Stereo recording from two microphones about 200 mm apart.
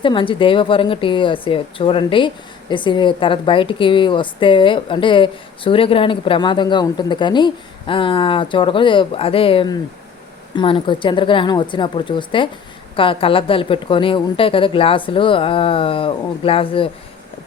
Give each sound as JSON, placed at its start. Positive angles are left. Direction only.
{"t": 0.0, "sound": "a woman's voice", "side_deg": 25}